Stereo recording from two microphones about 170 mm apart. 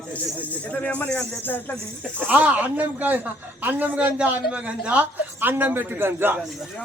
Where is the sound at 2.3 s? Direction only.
10° right (ahead or behind).